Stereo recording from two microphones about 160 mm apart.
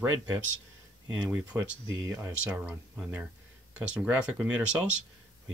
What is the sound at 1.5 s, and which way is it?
Speech, 15° right (ahead or behind).